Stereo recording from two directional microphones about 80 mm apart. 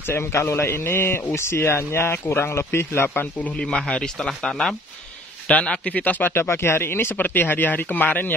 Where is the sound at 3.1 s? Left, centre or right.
Centre.